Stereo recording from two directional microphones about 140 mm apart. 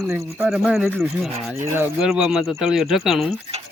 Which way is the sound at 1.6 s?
15° right (ahead or behind).